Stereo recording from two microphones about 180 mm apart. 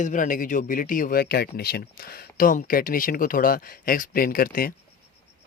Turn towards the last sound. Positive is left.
turn(degrees=55)  # may be behind; listen again after turning